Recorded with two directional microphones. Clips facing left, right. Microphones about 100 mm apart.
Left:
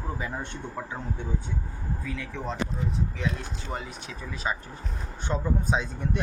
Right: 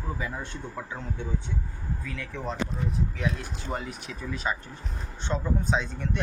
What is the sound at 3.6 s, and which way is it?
Speech, centre (ahead or behind).